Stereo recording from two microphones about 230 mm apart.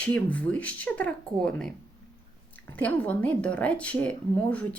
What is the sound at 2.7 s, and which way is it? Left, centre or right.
Speech, centre.